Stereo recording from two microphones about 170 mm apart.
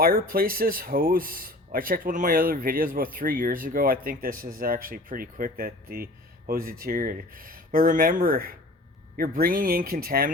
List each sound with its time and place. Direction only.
0.0 s speech: 60° right (ahead or behind)